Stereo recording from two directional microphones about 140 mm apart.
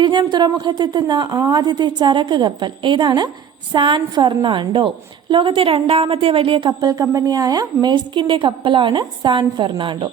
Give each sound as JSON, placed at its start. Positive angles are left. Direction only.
{"t": 0.0, "sound": "a woman's voice", "side_deg": -30}
{"t": 6.7, "sound": "a woman's voice", "side_deg": -25}